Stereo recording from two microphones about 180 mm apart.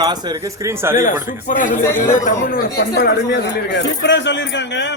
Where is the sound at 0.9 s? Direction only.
45° left (ahead or behind).